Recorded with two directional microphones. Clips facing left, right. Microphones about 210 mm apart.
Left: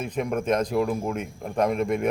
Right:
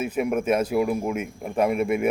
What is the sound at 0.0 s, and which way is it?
A man's voice, 5° right (ahead or behind).